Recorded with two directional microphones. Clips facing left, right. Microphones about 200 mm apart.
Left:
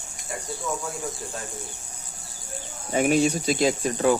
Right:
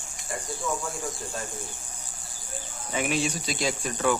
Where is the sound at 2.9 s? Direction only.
45° left (ahead or behind).